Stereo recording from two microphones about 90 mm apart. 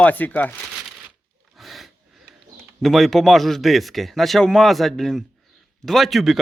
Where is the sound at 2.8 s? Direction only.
Centre (ahead or behind).